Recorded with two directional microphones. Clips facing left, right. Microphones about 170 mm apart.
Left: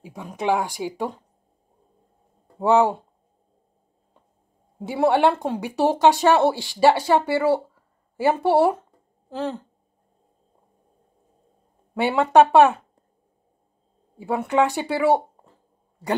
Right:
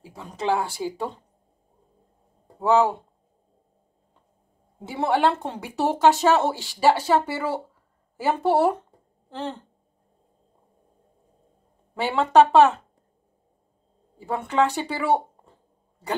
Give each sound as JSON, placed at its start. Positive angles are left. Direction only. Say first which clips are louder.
{"t": 0.0, "sound": "speech", "louder": "left 2 dB", "side_deg": 15}
{"t": 2.6, "sound": "speech", "louder": "left 2 dB", "side_deg": 15}
{"t": 4.8, "sound": "speech", "louder": "left 3 dB", "side_deg": 10}
{"t": 11.9, "sound": "speech", "louder": "left 2 dB", "side_deg": 10}
{"t": 14.1, "sound": "speech", "louder": "left 3 dB", "side_deg": 10}